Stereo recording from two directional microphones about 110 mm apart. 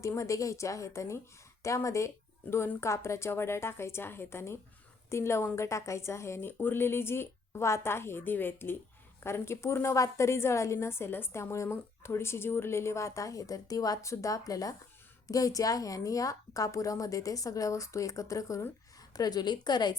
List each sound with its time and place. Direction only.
0.0 s a woman's voice: 30° left (ahead or behind)